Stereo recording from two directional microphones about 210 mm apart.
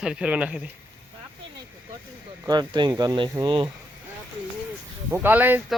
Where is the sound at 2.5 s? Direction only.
20° right (ahead or behind).